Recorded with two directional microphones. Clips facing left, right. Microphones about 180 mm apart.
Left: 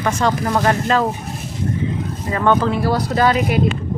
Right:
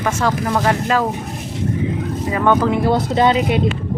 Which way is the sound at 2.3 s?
10° right (ahead or behind).